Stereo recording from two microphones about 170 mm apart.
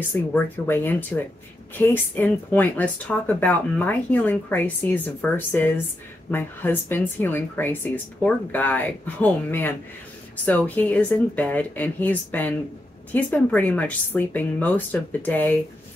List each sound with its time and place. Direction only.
0.1 s speech: 10° left (ahead or behind)